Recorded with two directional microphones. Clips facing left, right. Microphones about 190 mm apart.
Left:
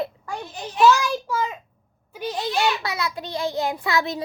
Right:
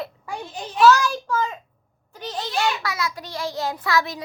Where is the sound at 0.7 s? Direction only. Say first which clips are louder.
Right 1 dB; 10° left (ahead or behind).